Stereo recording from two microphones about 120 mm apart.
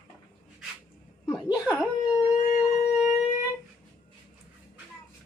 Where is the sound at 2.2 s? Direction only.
90° left.